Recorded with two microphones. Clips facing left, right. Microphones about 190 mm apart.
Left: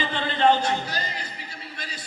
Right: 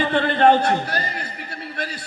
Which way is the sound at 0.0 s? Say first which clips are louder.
Right 6 dB; 60° right (ahead or behind).